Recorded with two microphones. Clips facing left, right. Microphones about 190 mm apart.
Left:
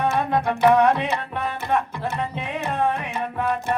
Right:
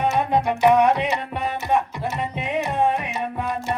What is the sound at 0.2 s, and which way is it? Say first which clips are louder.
Music: right 2 dB; 20° right (ahead or behind).